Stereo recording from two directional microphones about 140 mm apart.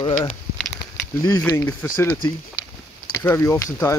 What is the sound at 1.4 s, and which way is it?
Speech, 20° left (ahead or behind).